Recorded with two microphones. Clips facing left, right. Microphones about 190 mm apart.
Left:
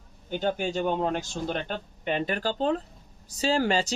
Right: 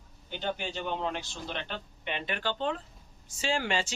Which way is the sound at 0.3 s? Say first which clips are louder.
Left 7 dB; 45° left (ahead or behind).